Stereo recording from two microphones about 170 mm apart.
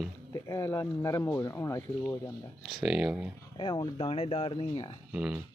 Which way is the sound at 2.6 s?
5° right (ahead or behind).